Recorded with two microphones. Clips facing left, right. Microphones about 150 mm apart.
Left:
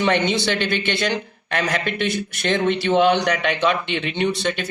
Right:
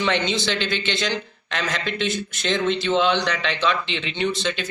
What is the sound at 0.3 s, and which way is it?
A man's voice, 55° left (ahead or behind).